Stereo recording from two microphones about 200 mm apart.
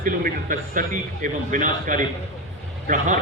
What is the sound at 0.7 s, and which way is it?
A man's voice, 40° right (ahead or behind).